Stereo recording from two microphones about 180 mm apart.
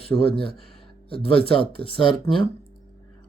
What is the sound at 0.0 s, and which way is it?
Speech, 30° left (ahead or behind).